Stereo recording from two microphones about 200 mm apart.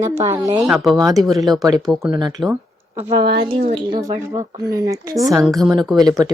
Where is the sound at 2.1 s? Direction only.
20° right (ahead or behind).